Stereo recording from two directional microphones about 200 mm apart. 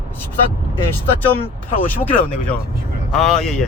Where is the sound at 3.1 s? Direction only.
Centre (ahead or behind).